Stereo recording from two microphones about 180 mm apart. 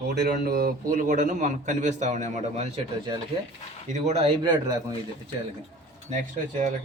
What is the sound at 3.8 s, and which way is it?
Speech, 40° right (ahead or behind).